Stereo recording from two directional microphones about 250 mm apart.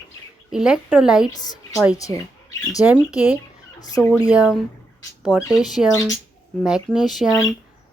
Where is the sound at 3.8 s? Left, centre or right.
Centre.